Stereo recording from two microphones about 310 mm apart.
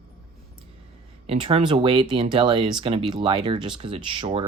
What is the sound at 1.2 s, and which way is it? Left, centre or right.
Speech, centre.